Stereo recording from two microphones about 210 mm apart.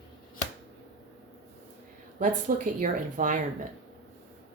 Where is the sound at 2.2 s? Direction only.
40° right (ahead or behind).